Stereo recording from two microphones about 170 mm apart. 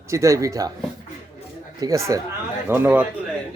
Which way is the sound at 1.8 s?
15° right (ahead or behind).